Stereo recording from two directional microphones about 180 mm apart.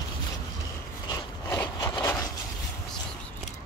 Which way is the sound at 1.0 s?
20° left (ahead or behind).